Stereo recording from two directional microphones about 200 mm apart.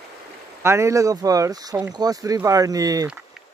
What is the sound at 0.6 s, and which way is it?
Speech, 15° right (ahead or behind).